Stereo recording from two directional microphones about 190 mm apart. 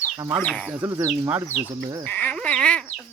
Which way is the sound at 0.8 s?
15° right (ahead or behind).